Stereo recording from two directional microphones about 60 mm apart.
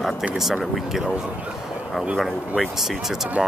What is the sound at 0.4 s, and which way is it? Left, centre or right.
Speech, centre.